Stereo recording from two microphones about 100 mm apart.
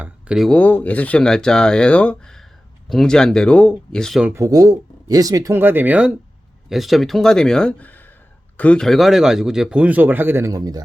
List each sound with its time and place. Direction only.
0.5 s speech: 15° left (ahead or behind)
4.4 s speech: 35° right (ahead or behind)
5.5 s speech: 20° right (ahead or behind)
10.5 s speech: 40° right (ahead or behind)